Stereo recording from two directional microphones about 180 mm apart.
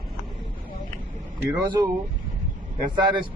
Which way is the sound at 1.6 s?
25° right (ahead or behind).